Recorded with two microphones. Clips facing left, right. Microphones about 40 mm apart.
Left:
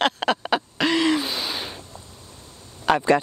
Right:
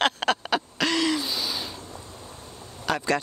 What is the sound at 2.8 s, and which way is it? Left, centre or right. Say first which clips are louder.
Speech: left 7 dB; left.